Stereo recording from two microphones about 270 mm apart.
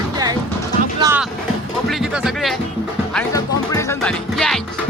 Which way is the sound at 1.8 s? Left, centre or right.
Centre.